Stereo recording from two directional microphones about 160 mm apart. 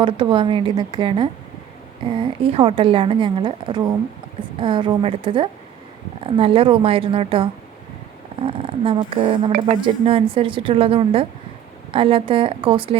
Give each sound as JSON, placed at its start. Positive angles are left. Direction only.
{"t": 0.0, "sound": "a woman's voice", "side_deg": -30}
{"t": 8.4, "sound": "a woman's voice", "side_deg": -35}